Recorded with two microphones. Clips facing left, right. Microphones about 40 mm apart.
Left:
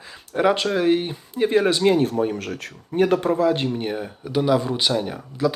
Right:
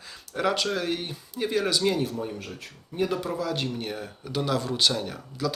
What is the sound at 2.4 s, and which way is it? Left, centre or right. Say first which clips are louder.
Speech: left 8 dB; left.